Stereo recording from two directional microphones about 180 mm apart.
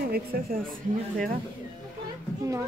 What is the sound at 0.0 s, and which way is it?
A woman's voice, 60° right (ahead or behind).